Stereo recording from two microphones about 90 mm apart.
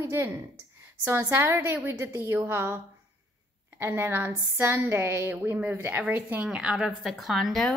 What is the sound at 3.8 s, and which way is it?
A woman's voice, 25° right (ahead or behind).